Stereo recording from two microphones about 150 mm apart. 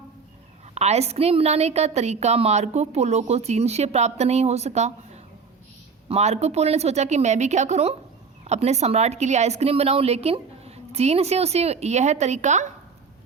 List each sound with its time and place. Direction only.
0.7 s a woman's voice: 45° right (ahead or behind)